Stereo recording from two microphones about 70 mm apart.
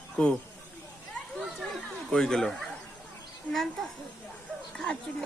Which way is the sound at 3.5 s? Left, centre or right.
Centre.